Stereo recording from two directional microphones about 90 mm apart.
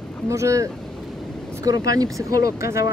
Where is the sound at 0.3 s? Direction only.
35° right (ahead or behind).